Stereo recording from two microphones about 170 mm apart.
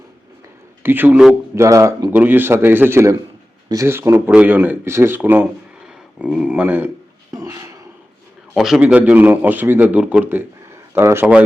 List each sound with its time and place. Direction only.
0.8 s a man's voice: 10° right (ahead or behind)
7.3 s a sound: 20° right (ahead or behind)
8.5 s a man's voice: centre (ahead or behind)